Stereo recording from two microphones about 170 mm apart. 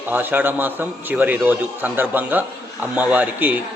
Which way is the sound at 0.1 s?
10° right (ahead or behind).